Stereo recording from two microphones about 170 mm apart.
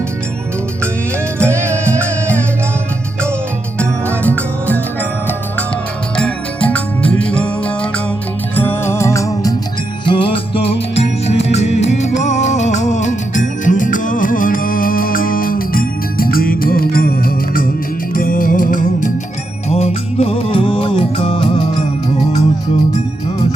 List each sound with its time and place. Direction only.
1.4 s music: 15° right (ahead or behind)
3.8 s music: 10° left (ahead or behind)
6.1 s music: 5° left (ahead or behind)
10.1 s music: 30° left (ahead or behind); by 19.1 s 50° left (ahead or behind)
19.7 s music: 35° left (ahead or behind)